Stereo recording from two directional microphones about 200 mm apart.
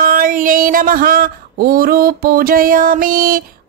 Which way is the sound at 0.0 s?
45° right (ahead or behind).